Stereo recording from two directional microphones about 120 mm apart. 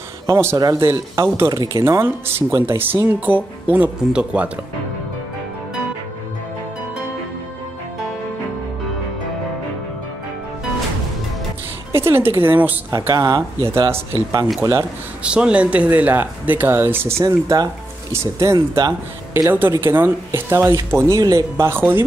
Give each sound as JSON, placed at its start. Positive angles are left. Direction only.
{"t": 0.3, "sound": "speech", "side_deg": -20}
{"t": 11.9, "sound": "speech", "side_deg": -20}
{"t": 12.9, "sound": "speech", "side_deg": -25}
{"t": 15.2, "sound": "speech", "side_deg": -10}
{"t": 17.2, "sound": "speech", "side_deg": -30}